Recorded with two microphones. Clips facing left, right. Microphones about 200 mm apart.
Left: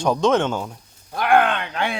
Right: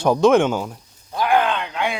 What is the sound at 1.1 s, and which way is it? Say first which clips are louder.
Groan: left 1 dB; 60° left (ahead or behind).